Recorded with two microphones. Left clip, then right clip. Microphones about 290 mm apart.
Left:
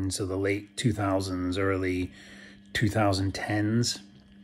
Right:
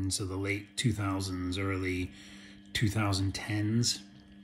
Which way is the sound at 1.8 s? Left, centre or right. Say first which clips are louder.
Left 5 dB; centre.